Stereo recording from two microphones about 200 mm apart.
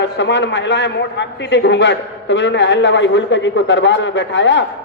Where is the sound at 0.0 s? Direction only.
65° left (ahead or behind).